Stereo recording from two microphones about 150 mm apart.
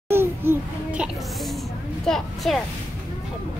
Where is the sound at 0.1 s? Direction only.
15° right (ahead or behind).